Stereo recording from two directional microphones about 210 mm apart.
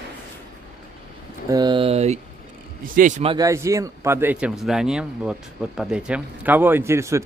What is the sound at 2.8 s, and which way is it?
Speech, 40° right (ahead or behind).